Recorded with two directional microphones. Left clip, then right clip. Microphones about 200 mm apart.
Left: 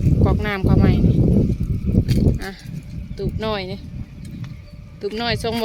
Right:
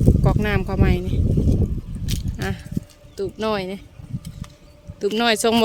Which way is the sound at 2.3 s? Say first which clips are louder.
Right 3 dB; 20° right (ahead or behind).